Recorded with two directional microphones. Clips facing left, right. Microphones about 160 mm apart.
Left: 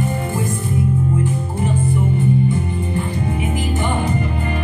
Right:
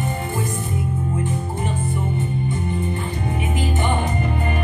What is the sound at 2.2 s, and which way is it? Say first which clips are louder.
Music: left 7 dB; 25° right (ahead or behind).